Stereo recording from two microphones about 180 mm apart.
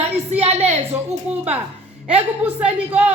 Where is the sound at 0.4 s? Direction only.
35° right (ahead or behind).